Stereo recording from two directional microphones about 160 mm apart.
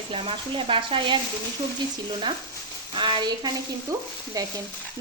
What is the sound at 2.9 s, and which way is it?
Sizzle, 30° right (ahead or behind).